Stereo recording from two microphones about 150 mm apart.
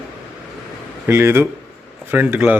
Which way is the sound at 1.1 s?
15° right (ahead or behind).